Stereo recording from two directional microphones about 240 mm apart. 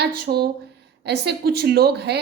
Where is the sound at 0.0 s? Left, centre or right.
Right.